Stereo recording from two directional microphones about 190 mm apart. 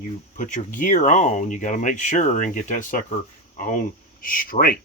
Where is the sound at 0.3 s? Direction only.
40° left (ahead or behind).